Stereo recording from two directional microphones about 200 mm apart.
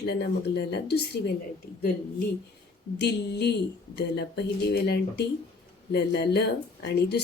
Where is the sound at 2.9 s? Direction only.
55° left (ahead or behind).